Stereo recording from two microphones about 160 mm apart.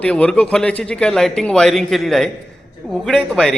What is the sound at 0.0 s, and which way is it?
A man's voice, 10° left (ahead or behind).